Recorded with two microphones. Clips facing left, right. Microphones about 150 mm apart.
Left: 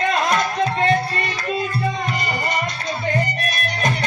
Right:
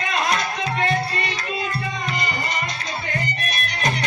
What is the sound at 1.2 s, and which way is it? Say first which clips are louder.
Music: left 3 dB; 50° left (ahead or behind).